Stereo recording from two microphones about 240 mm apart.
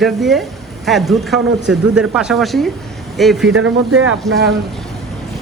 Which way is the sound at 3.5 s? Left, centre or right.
Right.